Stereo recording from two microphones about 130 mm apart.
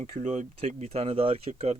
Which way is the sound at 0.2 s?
70° right (ahead or behind).